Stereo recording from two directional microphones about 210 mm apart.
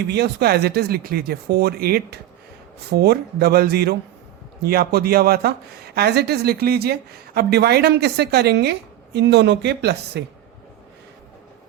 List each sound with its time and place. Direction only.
0.1 s speech: 50° right (ahead or behind)